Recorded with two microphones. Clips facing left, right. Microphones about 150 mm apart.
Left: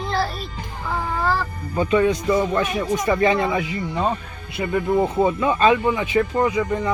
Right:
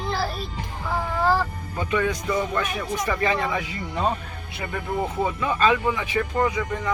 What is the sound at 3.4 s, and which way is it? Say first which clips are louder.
Speech: left 5 dB; 15° left (ahead or behind).